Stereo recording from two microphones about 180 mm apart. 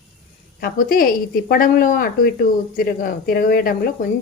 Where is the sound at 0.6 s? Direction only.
55° left (ahead or behind).